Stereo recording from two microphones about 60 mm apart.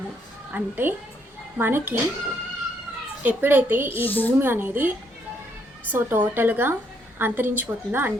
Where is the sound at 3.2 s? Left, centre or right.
Right.